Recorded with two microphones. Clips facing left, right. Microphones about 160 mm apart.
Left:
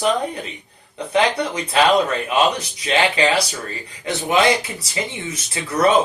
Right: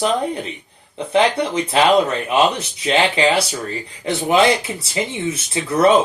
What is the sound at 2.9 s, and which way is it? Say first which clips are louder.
Speech: right 2 dB; 25° right (ahead or behind).